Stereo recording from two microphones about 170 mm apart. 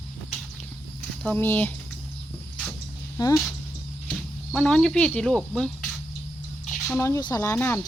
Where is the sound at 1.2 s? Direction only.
10° left (ahead or behind).